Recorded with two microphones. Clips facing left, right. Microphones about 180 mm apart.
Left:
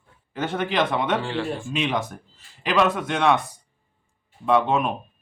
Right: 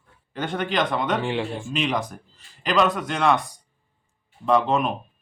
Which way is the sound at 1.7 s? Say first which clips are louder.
Right 1 dB; centre (ahead or behind).